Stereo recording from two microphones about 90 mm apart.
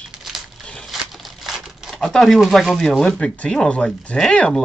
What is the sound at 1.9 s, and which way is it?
Speech, 5° left (ahead or behind).